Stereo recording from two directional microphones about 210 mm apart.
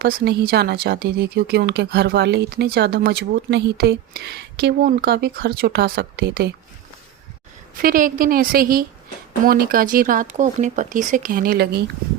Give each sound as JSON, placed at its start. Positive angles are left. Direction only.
{"t": 0.0, "sound": "speech", "side_deg": -50}
{"t": 7.8, "sound": "speech", "side_deg": -40}